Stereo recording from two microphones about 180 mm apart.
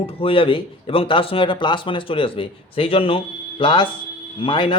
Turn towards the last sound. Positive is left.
turn(degrees=30)  # may be behind; listen again after turning